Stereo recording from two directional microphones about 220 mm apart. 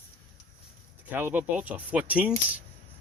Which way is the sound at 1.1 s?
10° right (ahead or behind).